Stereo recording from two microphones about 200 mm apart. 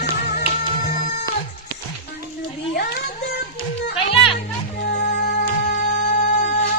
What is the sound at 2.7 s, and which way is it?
Music, 50° left (ahead or behind).